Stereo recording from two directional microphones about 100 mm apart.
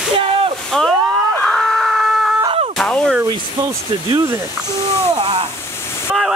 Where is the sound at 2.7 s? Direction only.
10° left (ahead or behind).